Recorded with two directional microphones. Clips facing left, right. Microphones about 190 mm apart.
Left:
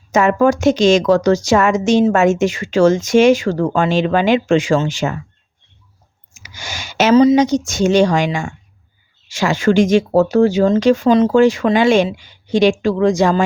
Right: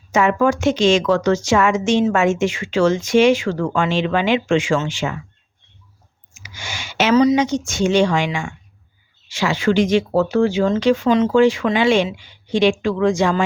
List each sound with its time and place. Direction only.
0.1 s speech: 40° left (ahead or behind)
6.3 s speech: 40° left (ahead or behind)